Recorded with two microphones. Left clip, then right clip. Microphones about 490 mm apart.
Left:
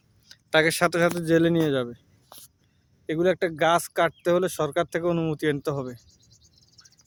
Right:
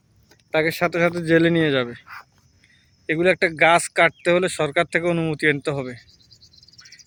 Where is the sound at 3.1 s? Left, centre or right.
Left.